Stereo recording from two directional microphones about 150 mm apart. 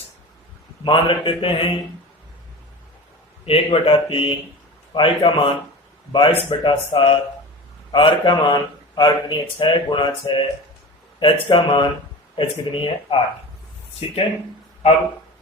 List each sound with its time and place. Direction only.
0.9 s speech: 35° left (ahead or behind)
3.4 s speech: 35° left (ahead or behind)